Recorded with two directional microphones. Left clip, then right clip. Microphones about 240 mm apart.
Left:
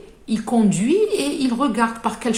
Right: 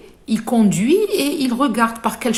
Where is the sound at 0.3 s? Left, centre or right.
Right.